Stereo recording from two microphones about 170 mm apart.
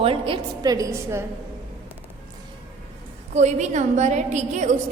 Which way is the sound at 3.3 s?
45° right (ahead or behind).